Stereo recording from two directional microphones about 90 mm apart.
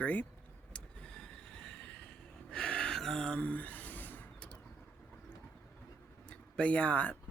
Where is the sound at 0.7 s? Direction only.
10° left (ahead or behind).